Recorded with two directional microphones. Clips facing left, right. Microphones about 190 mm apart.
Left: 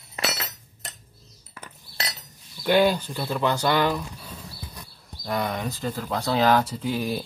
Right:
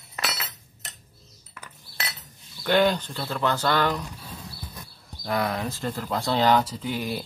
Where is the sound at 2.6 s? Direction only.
10° left (ahead or behind).